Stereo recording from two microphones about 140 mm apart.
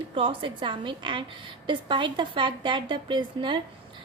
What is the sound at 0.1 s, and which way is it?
A woman's voice, 40° right (ahead or behind).